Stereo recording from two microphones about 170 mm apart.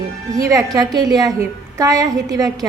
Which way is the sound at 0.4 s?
20° right (ahead or behind).